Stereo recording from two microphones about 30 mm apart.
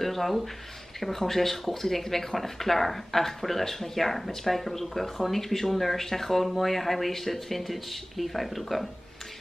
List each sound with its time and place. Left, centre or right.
0.0 s speech: centre